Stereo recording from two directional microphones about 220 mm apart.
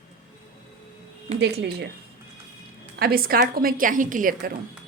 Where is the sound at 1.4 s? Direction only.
50° right (ahead or behind).